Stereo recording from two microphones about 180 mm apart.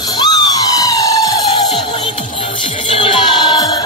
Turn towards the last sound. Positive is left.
turn(degrees=25)  # may be behind; listen again after turning